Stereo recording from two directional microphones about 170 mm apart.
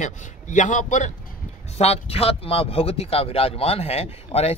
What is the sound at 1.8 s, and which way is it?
Speech, 35° left (ahead or behind).